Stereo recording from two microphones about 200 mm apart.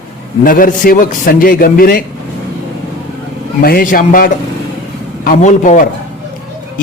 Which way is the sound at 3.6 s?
45° left (ahead or behind).